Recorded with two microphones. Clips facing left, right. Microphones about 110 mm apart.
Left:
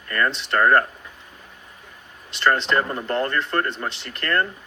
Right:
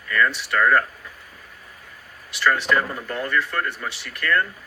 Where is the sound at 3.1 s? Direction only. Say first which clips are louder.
Left 5 dB; 60° left (ahead or behind).